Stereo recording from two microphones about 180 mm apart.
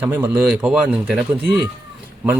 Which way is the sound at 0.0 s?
10° right (ahead or behind).